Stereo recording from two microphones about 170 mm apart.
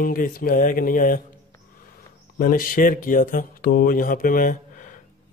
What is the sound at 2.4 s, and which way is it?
Speech, 55° left (ahead or behind).